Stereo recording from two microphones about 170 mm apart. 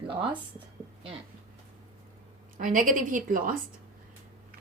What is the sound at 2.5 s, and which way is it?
A woman's voice, 50° right (ahead or behind).